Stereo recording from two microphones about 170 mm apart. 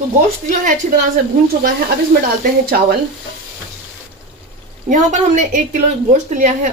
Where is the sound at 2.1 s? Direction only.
60° right (ahead or behind).